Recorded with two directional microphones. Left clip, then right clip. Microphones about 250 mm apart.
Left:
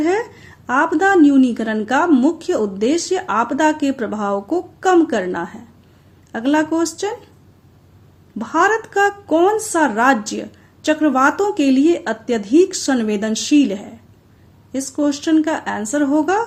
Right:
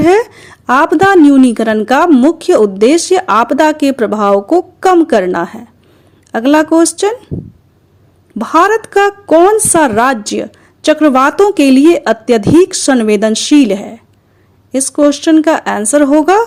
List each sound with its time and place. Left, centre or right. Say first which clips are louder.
0.0 s a woman's voice: right 10 dB; right
8.4 s a woman's voice: right 7 dB; right